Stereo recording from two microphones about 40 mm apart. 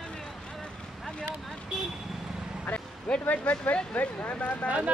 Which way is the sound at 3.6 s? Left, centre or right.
Left.